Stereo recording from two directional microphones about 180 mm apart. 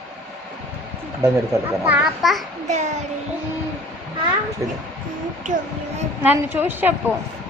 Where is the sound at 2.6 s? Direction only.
40° right (ahead or behind).